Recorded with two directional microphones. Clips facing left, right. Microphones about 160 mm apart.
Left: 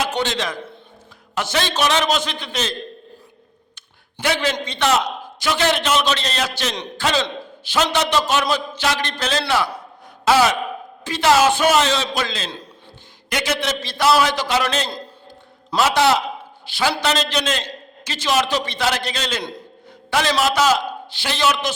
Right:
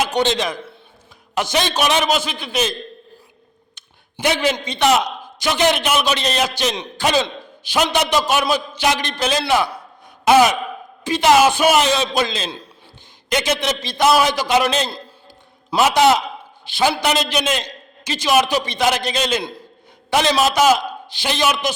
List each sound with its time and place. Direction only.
0.0 s a man's voice: 20° right (ahead or behind)
3.8 s a sound: 20° right (ahead or behind)
4.5 s a man's voice: 10° right (ahead or behind)